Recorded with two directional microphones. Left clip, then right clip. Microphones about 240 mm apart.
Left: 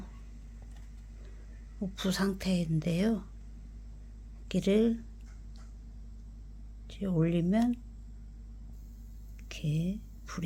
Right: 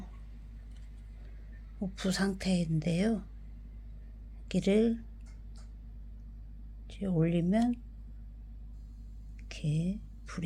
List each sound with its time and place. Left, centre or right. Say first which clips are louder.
1.8 s a woman's voice: left 1 dB; centre
4.4 s a woman's voice: even; centre
6.8 s speech: even; centre
9.5 s whispering: even; centre